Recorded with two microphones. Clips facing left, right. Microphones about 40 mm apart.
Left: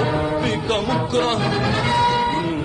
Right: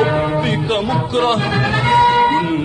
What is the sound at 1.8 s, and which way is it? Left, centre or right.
Music, right.